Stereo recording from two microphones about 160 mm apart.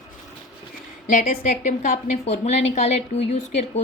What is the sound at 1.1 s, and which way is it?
A woman's voice, 55° left (ahead or behind).